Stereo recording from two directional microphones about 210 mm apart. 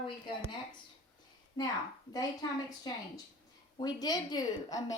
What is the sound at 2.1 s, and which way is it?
Speech, 20° left (ahead or behind).